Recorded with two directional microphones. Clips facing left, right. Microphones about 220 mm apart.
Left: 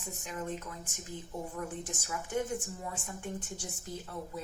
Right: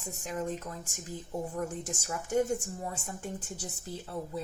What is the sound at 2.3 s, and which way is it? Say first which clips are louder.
Speech: right 6 dB; 40° right (ahead or behind).